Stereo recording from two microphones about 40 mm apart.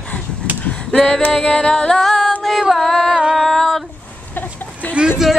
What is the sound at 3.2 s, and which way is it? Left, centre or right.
Music, centre.